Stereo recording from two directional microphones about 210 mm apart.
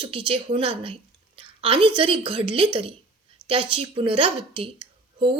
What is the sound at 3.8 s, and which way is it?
A woman's voice, 25° right (ahead or behind).